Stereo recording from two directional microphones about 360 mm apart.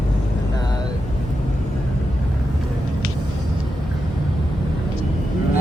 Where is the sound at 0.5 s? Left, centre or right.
Centre.